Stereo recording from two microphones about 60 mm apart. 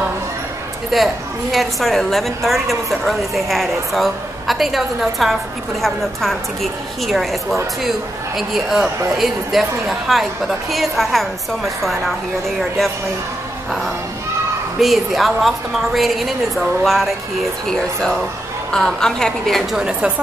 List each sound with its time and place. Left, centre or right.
0.9 s a woman's voice: centre
8.4 s a woman's voice: centre
14.8 s a woman's voice: centre
19.8 s a woman's voice: centre